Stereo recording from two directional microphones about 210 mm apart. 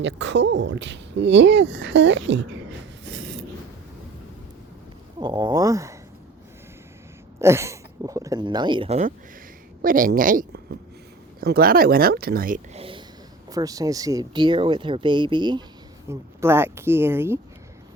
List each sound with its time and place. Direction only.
0.0 s speech: 60° right (ahead or behind)
3.0 s a sound: 60° right (ahead or behind)
5.2 s speech: 20° right (ahead or behind)
7.3 s a woman's voice: 10° right (ahead or behind); by 12.5 s 45° right (ahead or behind)
12.7 s a sound: 25° right (ahead or behind)
13.5 s speech: 15° right (ahead or behind)